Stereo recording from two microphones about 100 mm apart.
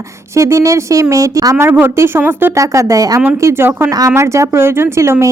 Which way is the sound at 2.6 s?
30° right (ahead or behind).